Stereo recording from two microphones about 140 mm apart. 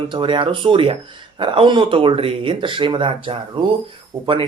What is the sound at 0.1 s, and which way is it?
Speech, 35° right (ahead or behind).